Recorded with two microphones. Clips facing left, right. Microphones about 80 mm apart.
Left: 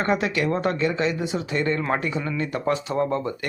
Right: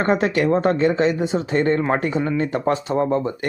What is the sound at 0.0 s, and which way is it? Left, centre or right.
Speech, right.